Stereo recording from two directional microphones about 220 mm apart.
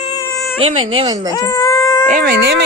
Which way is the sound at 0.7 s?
70° right (ahead or behind).